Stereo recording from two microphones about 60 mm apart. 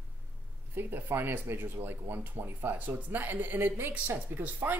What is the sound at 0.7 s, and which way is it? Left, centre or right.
Speech, right.